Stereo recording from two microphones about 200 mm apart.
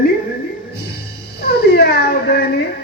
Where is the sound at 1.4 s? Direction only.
55° left (ahead or behind).